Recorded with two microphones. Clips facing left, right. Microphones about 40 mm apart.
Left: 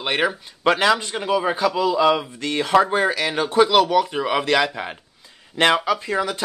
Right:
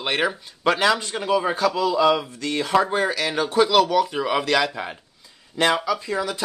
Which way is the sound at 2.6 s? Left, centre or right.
Left.